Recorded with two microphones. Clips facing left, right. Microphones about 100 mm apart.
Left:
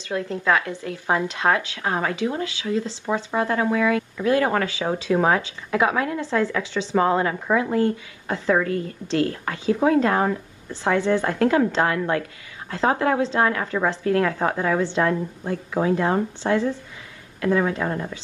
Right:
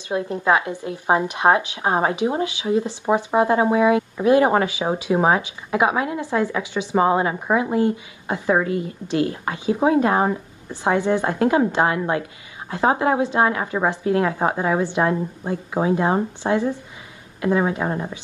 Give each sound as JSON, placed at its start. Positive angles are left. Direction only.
{"t": 0.1, "sound": "a woman's voice", "side_deg": -20}